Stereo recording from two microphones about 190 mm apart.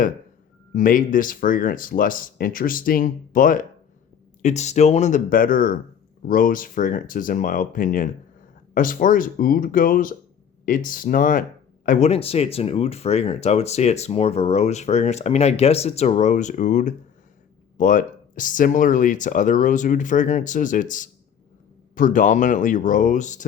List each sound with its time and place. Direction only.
0.7 s speech: 45° left (ahead or behind)